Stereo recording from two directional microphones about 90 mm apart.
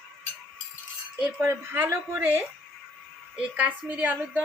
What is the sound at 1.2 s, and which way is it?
A woman's voice, 20° right (ahead or behind).